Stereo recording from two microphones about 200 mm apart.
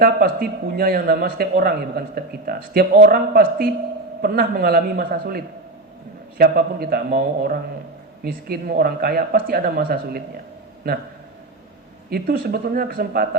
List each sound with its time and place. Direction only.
0.0 s speech: 45° right (ahead or behind)
12.1 s speech: 45° right (ahead or behind)